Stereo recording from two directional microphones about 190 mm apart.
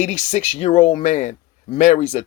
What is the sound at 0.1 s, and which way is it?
Speech, 35° left (ahead or behind).